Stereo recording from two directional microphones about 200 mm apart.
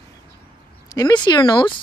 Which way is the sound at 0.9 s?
20° left (ahead or behind).